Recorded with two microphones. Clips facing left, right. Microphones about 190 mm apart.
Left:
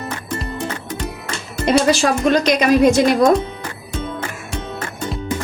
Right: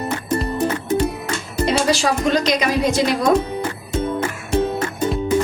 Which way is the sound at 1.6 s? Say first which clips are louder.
Left 4 dB; 50° left (ahead or behind).